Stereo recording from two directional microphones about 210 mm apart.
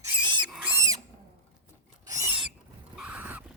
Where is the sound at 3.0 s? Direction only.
5° right (ahead or behind).